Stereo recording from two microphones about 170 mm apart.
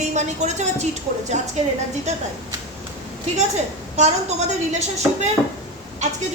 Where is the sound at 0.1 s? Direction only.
45° right (ahead or behind).